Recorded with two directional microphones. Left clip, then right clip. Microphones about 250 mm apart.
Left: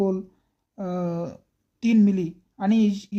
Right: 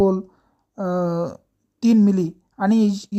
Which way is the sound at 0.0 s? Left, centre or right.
Centre.